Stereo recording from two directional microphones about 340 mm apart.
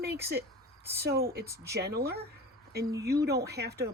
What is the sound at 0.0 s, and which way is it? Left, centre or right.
Speech, right.